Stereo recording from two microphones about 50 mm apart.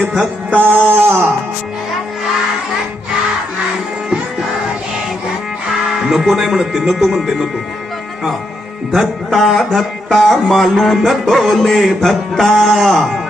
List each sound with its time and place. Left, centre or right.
0.5 s music: left
1.0 s music: right
6.1 s speech: centre
6.8 s music: centre
8.9 s music: centre